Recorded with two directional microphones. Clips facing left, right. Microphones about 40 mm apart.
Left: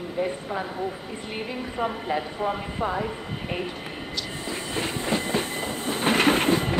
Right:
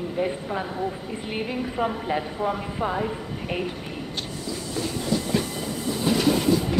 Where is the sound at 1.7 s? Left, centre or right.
Centre.